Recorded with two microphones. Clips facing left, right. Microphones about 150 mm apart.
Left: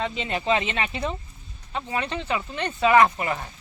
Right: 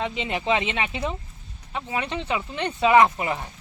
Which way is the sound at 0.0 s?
15° right (ahead or behind).